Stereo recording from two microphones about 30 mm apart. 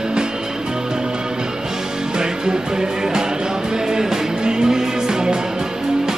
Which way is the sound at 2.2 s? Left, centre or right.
Right.